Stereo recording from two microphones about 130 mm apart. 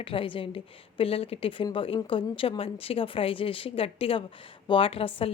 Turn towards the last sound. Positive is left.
turn(degrees=45)  # may be behind; listen again after turning